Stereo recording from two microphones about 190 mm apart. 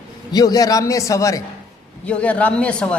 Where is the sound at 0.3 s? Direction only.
20° left (ahead or behind).